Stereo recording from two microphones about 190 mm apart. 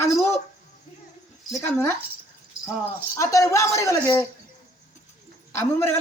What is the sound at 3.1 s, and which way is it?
A man's voice, 15° left (ahead or behind).